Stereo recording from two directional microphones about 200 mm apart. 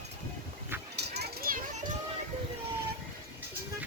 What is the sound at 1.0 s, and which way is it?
Children playing, 55° right (ahead or behind).